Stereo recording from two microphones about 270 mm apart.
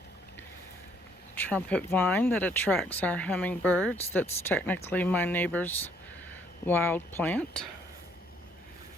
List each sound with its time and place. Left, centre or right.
1.4 s speech: centre